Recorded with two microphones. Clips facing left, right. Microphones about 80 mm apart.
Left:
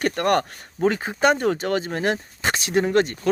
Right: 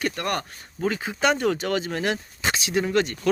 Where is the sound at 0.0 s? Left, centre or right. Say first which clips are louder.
Left 6 dB; left.